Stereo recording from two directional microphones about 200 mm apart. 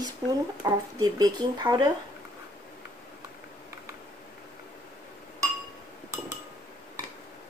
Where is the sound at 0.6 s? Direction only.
20° right (ahead or behind).